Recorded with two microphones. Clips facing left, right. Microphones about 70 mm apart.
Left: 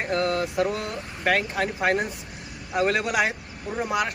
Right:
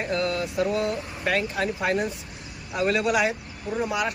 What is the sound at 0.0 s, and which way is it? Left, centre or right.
Mantra, left.